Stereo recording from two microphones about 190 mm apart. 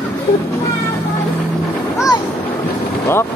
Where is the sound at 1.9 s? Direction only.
20° left (ahead or behind).